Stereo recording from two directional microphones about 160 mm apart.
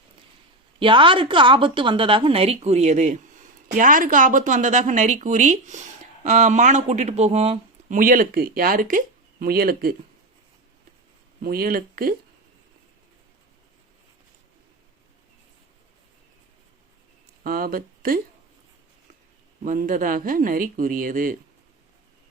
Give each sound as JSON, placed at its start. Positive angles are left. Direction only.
{"t": 0.8, "sound": "a woman's voice", "side_deg": -30}
{"t": 7.9, "sound": "speech", "side_deg": -60}
{"t": 11.4, "sound": "speech", "side_deg": -70}
{"t": 17.4, "sound": "speech", "side_deg": -65}
{"t": 19.6, "sound": "speech", "side_deg": -55}